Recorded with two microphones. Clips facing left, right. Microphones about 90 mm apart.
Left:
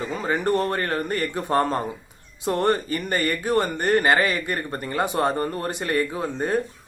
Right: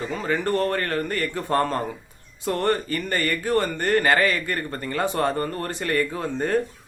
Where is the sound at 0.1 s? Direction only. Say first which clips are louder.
Left 1 dB; 20° left (ahead or behind).